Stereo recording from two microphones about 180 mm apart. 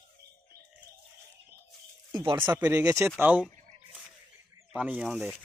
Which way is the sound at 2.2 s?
25° right (ahead or behind).